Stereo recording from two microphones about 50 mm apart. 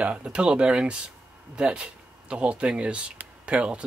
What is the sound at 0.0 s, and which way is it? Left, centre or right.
Speech, right.